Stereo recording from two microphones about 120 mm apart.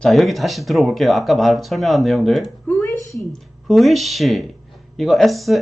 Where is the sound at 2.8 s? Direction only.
25° left (ahead or behind).